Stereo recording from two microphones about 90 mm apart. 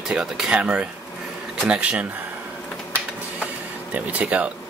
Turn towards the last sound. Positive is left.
turn(degrees=-15)  # may be behind; listen again after turning